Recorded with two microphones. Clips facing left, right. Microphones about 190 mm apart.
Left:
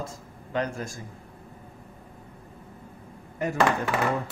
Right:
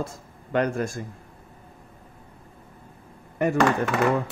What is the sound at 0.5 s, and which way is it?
Speech, 60° right (ahead or behind).